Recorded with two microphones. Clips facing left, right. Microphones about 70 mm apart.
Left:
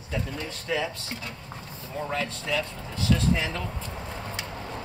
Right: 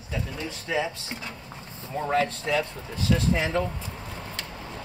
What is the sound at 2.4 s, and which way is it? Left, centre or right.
Speech, right.